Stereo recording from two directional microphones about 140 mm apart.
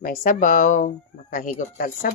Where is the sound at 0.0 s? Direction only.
70° left (ahead or behind).